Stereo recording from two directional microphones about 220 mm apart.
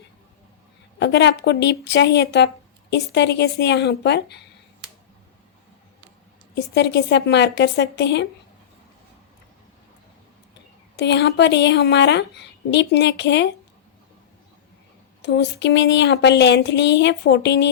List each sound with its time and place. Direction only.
0.9 s a woman's voice: 50° left (ahead or behind)
6.5 s a woman's voice: 50° left (ahead or behind)
10.9 s a woman's voice: 50° left (ahead or behind)
15.2 s a woman's voice: 50° left (ahead or behind)